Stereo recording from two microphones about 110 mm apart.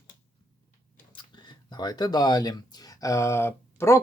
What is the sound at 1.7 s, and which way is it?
Speech, 40° left (ahead or behind).